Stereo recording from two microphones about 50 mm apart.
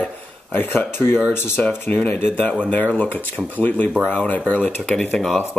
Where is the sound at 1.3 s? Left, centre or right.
Left.